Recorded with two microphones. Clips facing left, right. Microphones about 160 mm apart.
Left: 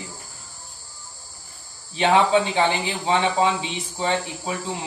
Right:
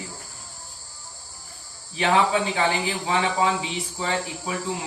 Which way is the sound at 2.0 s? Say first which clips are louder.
Left 3 dB; 25° left (ahead or behind).